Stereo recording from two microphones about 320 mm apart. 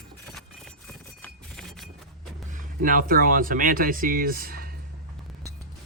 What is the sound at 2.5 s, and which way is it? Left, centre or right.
Speech, right.